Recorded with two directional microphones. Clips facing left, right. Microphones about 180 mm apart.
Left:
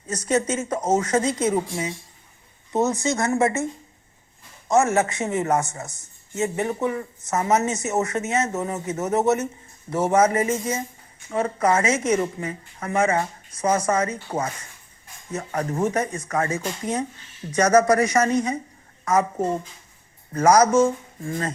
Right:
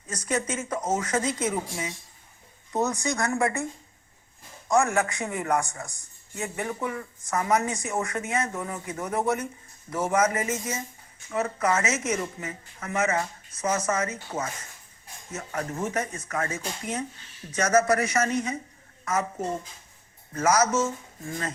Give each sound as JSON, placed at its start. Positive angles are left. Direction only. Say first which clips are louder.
{"t": 0.1, "sound": "speech", "louder": "left 6 dB", "side_deg": 25}
{"t": 4.7, "sound": "a woman's voice", "louder": "left 4 dB", "side_deg": 20}
{"t": 15.3, "sound": "a woman's voice", "louder": "left 6 dB", "side_deg": 35}
{"t": 20.3, "sound": "a woman's voice", "louder": "left 7 dB", "side_deg": 35}